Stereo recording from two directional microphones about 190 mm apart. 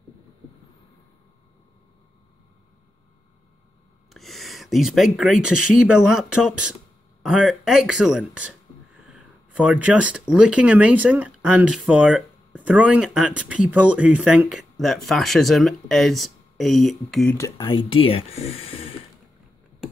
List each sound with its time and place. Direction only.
4.1 s speech: centre (ahead or behind)
17.4 s speech: 20° left (ahead or behind)